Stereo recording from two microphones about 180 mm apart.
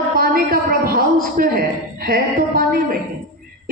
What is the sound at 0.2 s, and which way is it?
A man's voice, 55° right (ahead or behind).